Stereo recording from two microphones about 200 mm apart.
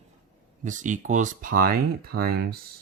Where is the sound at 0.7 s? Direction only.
40° right (ahead or behind).